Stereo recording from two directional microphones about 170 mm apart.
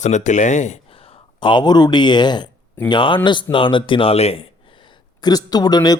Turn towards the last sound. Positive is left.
turn(degrees=25)  # may be behind; listen again after turning